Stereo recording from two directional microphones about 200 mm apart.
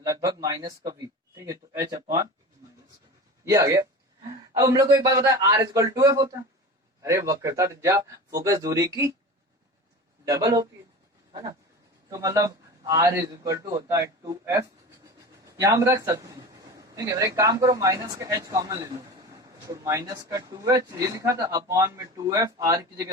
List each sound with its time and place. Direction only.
0.0 s a man's voice: 15° right (ahead or behind)
3.5 s a man's voice: 15° right (ahead or behind)
10.2 s a man's voice: 15° right (ahead or behind)
11.3 s a sound: 20° right (ahead or behind)
12.0 s a man's voice: 15° right (ahead or behind)